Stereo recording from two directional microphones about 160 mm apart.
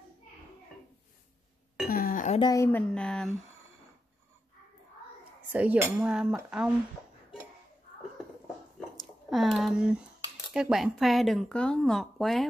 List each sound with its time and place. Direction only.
1.9 s a sound: 60° left (ahead or behind)
2.5 s a woman's voice: 15° left (ahead or behind)
2.8 s speech: 5° left (ahead or behind)
5.5 s speech: 10° right (ahead or behind)
8.7 s squish: centre (ahead or behind)
10.5 s speech: 5° right (ahead or behind)